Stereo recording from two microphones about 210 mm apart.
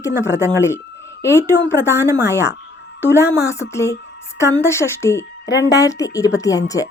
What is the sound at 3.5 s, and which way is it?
Speech, 15° left (ahead or behind).